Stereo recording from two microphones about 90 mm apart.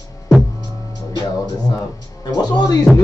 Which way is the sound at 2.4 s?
50° left (ahead or behind).